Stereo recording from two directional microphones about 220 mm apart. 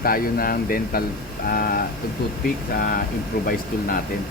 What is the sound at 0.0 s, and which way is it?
Speech, 40° left (ahead or behind).